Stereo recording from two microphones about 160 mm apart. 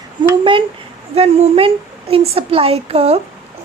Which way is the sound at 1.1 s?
40° right (ahead or behind).